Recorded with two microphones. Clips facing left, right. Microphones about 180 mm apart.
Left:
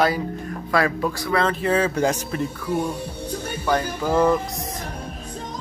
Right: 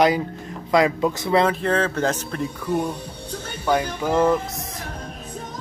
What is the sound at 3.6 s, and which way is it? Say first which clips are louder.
Speech: right 2 dB; 10° right (ahead or behind).